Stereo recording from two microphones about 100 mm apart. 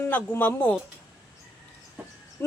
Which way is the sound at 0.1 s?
15° left (ahead or behind).